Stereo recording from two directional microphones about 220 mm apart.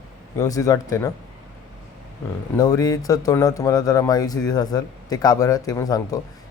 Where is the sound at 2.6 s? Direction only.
15° left (ahead or behind).